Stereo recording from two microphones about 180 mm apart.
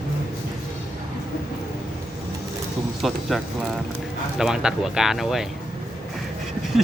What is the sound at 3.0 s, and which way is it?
Speech, centre (ahead or behind).